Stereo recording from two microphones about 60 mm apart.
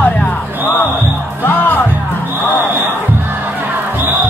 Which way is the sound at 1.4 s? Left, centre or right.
Left.